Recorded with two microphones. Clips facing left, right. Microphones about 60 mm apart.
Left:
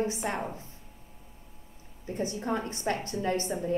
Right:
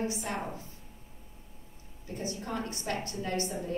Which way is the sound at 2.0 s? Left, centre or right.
Left.